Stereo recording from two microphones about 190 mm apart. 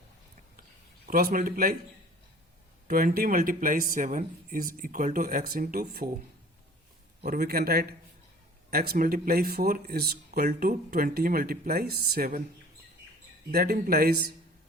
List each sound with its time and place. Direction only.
1.0 s speech: 50° right (ahead or behind)
2.8 s speech: 50° right (ahead or behind)
7.3 s speech: 55° right (ahead or behind)
13.5 s speech: 55° right (ahead or behind)